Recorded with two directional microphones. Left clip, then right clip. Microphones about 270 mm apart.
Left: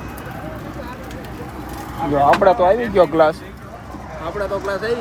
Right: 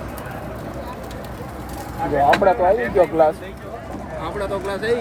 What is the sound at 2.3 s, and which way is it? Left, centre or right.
Speech, left.